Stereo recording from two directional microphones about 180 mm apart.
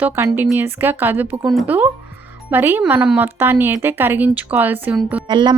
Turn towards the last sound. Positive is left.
turn(degrees=-25)  # may be behind; listen again after turning